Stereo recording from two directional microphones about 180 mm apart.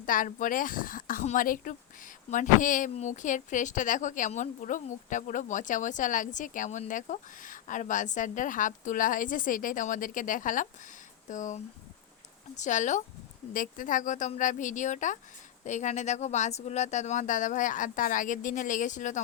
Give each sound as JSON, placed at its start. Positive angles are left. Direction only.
{"t": 0.0, "sound": "speech", "side_deg": 50}